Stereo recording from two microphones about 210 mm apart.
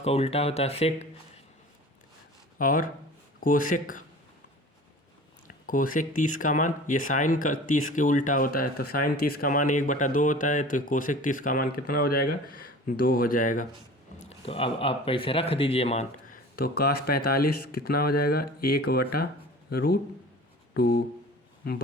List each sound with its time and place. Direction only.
0.0 s speech: 30° left (ahead or behind)
2.6 s speech: 40° left (ahead or behind)
5.6 s speech: 40° left (ahead or behind)
14.3 s speech: 25° left (ahead or behind)
16.6 s a man's voice: 45° left (ahead or behind)